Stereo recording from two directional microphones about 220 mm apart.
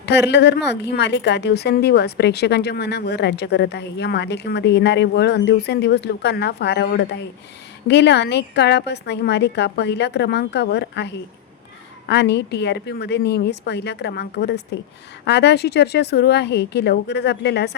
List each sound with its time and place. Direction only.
0.0 s a woman's voice: 50° left (ahead or behind)